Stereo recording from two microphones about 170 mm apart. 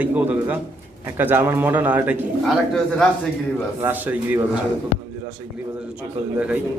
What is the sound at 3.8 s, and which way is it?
Speech, 10° right (ahead or behind).